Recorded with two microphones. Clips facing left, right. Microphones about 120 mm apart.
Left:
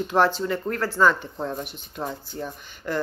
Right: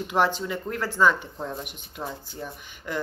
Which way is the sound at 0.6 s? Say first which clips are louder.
Left 3 dB; 45° left (ahead or behind).